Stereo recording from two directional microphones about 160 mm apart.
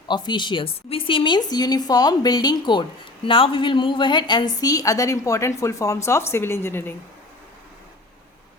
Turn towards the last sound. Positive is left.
turn(degrees=15)  # may be behind; listen again after turning